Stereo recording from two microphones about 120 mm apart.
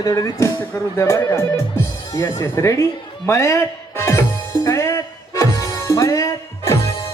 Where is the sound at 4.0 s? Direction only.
25° left (ahead or behind).